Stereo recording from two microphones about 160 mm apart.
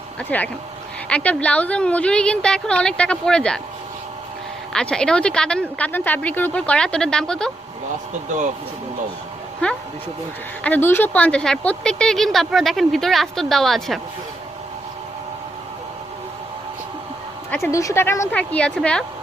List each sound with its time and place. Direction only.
0.2 s a woman's voice: 10° left (ahead or behind)
4.7 s speech: 5° left (ahead or behind)
9.6 s a woman's voice: 5° left (ahead or behind)
17.5 s a woman's voice: 20° left (ahead or behind)